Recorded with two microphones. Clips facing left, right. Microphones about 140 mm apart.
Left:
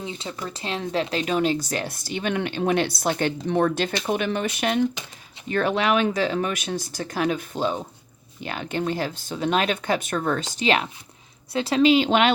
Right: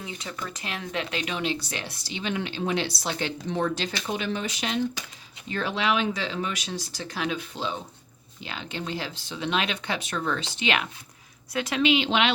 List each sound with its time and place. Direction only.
0.0 s speech: 25° left (ahead or behind); by 12.3 s 45° left (ahead or behind)